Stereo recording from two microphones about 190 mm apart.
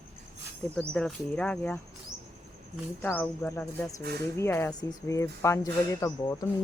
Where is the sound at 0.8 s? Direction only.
5° left (ahead or behind).